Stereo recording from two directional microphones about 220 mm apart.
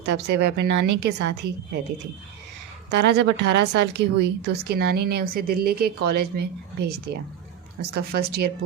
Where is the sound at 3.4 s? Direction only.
50° right (ahead or behind).